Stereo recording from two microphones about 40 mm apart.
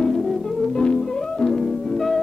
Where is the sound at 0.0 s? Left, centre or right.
Centre.